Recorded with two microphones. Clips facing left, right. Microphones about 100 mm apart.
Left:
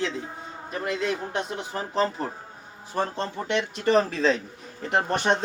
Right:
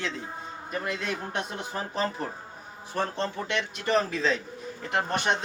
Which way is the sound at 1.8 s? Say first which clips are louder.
Left 5 dB; centre (ahead or behind).